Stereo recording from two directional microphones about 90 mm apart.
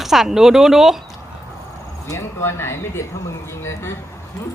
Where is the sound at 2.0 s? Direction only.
30° left (ahead or behind).